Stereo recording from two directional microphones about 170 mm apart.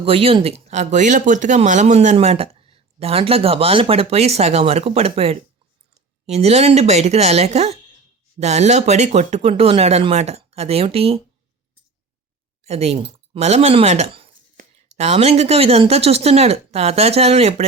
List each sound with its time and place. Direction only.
0.0 s speech: 35° right (ahead or behind)
12.6 s speech: 40° right (ahead or behind)
14.5 s speech: 45° right (ahead or behind)